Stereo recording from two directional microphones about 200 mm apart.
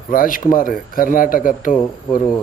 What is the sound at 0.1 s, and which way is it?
Speech, 45° left (ahead or behind).